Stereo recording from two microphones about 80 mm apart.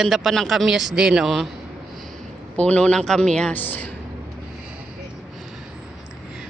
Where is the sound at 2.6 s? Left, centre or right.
Centre.